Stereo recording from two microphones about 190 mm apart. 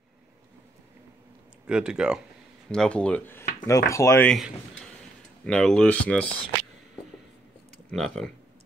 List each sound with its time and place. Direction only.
1.7 s speech: 5° right (ahead or behind); by 4.3 s 15° left (ahead or behind)
4.3 s speech: centre (ahead or behind)
7.9 s speech: centre (ahead or behind)